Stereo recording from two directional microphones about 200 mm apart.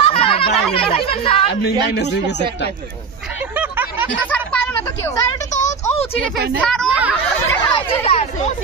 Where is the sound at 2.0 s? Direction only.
60° left (ahead or behind).